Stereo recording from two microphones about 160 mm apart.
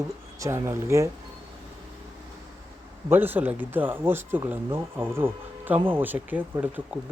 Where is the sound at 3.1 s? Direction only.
10° right (ahead or behind).